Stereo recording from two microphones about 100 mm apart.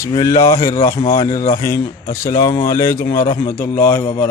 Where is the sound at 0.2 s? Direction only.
35° left (ahead or behind).